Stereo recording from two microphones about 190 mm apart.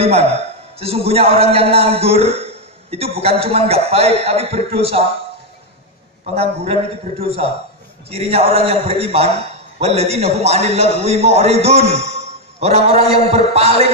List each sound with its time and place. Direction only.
0.0 s a man's voice: 30° right (ahead or behind)
6.3 s a man's voice: 35° right (ahead or behind)